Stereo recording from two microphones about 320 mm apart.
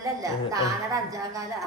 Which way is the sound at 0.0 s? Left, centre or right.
Centre.